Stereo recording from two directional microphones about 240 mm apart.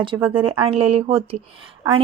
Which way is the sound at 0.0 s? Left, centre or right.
Right.